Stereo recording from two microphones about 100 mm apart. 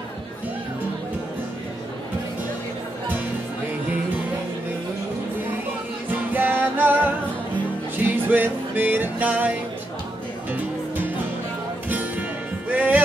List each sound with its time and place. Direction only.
6.0 s music: 15° right (ahead or behind)
11.9 s music: 15° right (ahead or behind)